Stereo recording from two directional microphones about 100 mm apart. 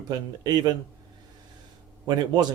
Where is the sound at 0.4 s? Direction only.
45° right (ahead or behind).